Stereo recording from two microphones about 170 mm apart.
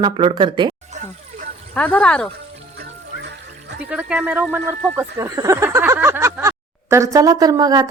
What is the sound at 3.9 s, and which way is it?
Speech, 5° right (ahead or behind).